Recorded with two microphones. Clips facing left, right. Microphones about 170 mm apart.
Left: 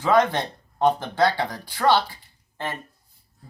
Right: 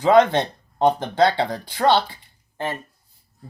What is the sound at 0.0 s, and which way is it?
Speech, 20° right (ahead or behind).